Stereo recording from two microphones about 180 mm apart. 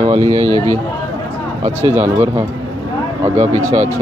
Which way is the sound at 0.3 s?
15° left (ahead or behind).